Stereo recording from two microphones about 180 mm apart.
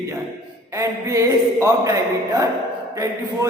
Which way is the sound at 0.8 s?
15° right (ahead or behind).